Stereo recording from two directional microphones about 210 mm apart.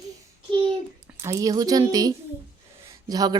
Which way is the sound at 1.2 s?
15° right (ahead or behind).